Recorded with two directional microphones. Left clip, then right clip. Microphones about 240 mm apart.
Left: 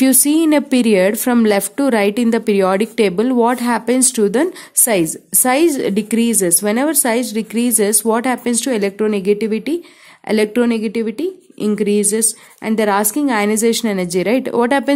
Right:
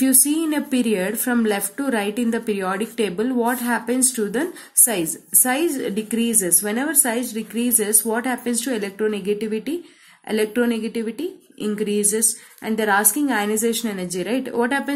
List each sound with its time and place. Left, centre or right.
0.0 s a woman's voice: left